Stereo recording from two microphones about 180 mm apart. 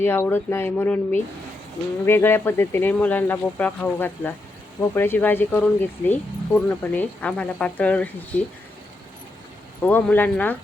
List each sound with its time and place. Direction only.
0.0 s speech: 10° left (ahead or behind)
9.8 s speech: 10° left (ahead or behind)